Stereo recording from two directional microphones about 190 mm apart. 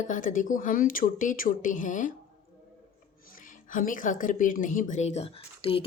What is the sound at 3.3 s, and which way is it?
Speech, 45° left (ahead or behind).